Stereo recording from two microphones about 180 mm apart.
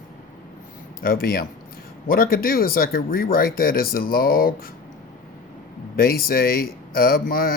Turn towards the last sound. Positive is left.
turn(degrees=55)  # may be behind; listen again after turning